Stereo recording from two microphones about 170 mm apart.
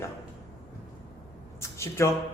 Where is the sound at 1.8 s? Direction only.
15° left (ahead or behind).